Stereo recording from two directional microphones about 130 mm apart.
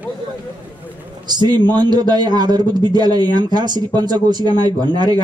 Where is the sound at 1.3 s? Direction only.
35° right (ahead or behind).